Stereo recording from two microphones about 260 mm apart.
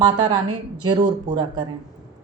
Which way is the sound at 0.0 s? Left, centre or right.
Centre.